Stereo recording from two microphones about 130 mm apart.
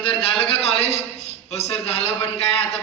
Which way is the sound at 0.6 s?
50° left (ahead or behind).